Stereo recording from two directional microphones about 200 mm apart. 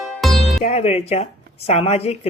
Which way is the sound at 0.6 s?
30° left (ahead or behind).